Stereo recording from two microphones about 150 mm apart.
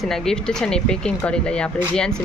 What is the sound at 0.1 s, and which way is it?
Speech, 5° left (ahead or behind).